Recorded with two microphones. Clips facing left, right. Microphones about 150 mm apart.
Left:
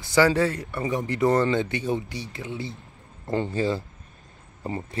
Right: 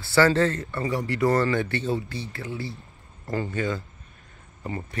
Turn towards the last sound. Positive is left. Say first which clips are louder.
# left 2 dB
turn(degrees=30)  # may be behind; listen again after turning